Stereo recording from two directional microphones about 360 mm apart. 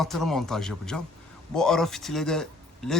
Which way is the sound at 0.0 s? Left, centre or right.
Centre.